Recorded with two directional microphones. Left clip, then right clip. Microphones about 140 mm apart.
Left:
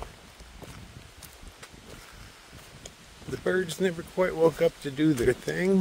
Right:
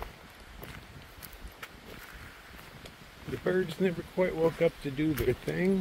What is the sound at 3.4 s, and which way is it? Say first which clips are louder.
Speech: left 2 dB; 65° left (ahead or behind).